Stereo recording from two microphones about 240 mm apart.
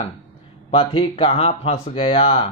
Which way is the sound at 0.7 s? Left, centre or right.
Left.